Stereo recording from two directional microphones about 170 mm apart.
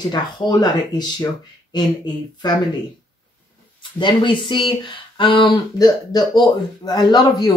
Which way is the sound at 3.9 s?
30° left (ahead or behind).